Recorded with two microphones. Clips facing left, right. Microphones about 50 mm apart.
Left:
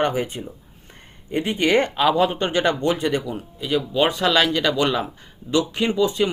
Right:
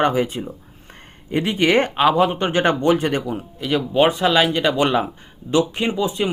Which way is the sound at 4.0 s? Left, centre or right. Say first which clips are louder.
Right 3 dB; right.